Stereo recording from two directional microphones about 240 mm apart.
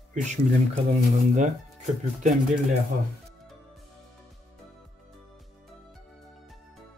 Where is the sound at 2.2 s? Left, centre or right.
Right.